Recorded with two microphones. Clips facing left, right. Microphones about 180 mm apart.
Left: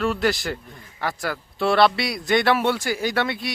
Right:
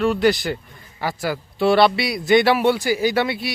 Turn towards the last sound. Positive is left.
turn(degrees=-5)  # may be behind; listen again after turning